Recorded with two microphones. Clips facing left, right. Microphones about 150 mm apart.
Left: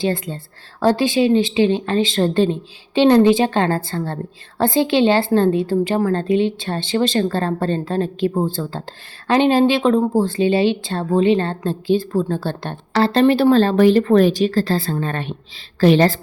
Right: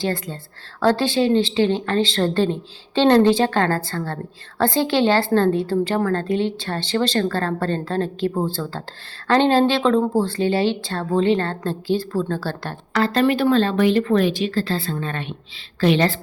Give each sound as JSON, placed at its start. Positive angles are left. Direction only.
{"t": 0.0, "sound": "a woman's voice", "side_deg": 20}